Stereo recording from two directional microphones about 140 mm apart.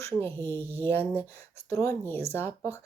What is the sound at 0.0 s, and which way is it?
Speech, 15° left (ahead or behind).